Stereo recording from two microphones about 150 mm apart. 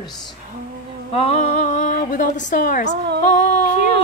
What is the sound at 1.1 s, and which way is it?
A woman's voice, 45° left (ahead or behind).